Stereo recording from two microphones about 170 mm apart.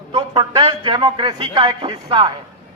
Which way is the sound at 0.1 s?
30° right (ahead or behind).